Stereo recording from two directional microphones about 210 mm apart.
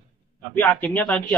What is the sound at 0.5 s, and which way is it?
Speech, 10° left (ahead or behind).